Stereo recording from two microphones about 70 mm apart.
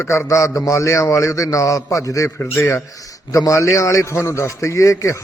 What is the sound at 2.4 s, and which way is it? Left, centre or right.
Speech, left.